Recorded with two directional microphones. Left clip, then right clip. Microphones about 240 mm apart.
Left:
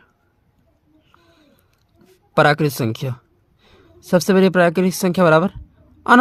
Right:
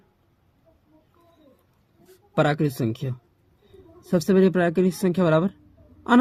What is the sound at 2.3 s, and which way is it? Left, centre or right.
A woman's voice, left.